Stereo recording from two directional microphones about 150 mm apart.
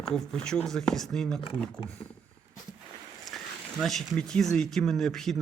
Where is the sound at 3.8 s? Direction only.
Centre (ahead or behind).